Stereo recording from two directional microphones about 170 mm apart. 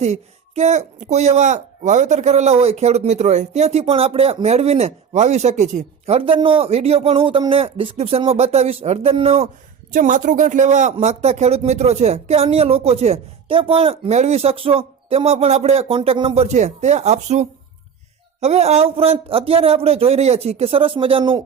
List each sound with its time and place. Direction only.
0.0 s speech: 40° right (ahead or behind)
9.9 s a man's voice: 50° right (ahead or behind); by 21.4 s 30° right (ahead or behind)